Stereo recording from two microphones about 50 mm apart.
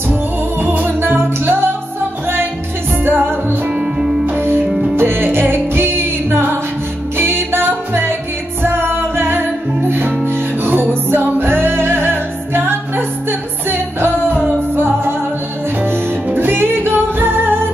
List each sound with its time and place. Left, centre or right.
0.1 s music: right
3.0 s music: right
3.7 s music: centre
4.3 s music: right
4.6 s music: centre
4.9 s music: right
15.8 s music: right